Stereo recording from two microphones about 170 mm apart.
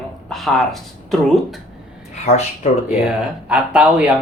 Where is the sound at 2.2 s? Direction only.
40° left (ahead or behind).